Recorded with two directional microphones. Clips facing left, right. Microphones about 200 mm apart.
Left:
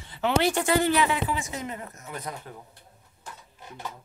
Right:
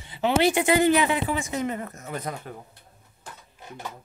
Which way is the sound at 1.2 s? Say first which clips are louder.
Right 4 dB; 50° right (ahead or behind).